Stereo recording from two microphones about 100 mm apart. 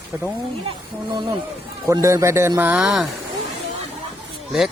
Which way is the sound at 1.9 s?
30° right (ahead or behind).